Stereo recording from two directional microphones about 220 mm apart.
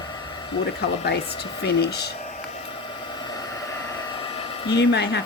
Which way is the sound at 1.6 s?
45° left (ahead or behind).